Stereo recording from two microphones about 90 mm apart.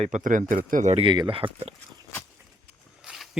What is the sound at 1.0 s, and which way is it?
Speech, 70° right (ahead or behind).